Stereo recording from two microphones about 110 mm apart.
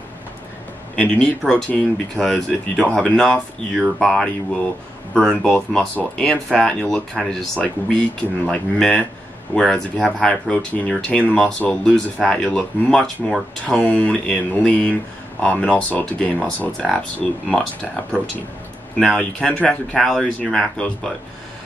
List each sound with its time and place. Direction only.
0.9 s speech: 10° left (ahead or behind)
18.9 s speech: 10° left (ahead or behind)